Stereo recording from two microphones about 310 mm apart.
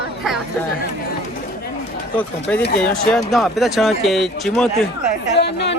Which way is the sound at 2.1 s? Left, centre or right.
Centre.